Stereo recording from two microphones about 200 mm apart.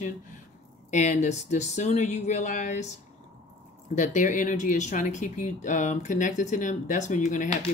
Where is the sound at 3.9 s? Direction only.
40° left (ahead or behind).